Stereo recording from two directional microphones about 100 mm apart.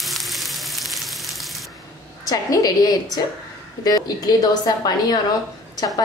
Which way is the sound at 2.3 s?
40° left (ahead or behind).